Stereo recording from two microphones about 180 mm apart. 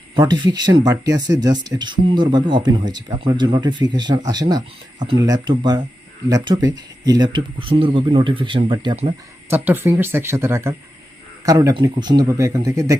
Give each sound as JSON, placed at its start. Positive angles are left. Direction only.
{"t": 0.2, "sound": "speech", "side_deg": -25}
{"t": 9.5, "sound": "speech", "side_deg": -10}